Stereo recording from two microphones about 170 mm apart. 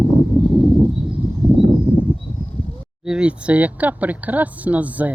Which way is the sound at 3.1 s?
5° right (ahead or behind).